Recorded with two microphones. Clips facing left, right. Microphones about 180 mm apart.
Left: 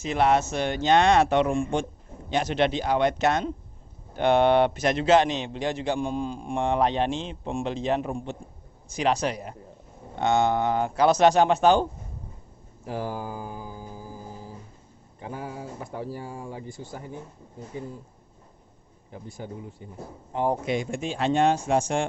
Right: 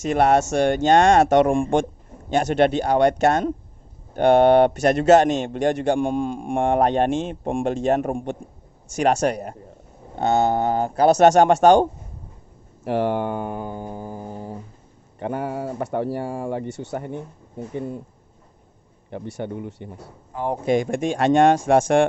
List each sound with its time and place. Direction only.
0.1 s a man's voice: 50° right (ahead or behind)
12.8 s speech: 70° right (ahead or behind)
19.1 s speech: 70° right (ahead or behind)
20.3 s speech: 25° left (ahead or behind)
20.7 s a man's voice: 55° right (ahead or behind)